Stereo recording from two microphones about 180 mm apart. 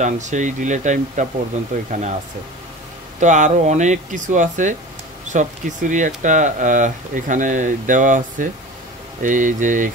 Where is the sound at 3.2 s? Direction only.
45° right (ahead or behind).